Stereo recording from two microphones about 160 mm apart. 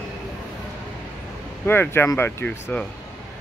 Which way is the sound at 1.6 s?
15° left (ahead or behind).